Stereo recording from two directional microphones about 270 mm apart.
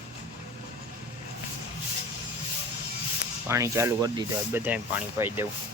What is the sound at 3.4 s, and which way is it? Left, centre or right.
Speech, centre.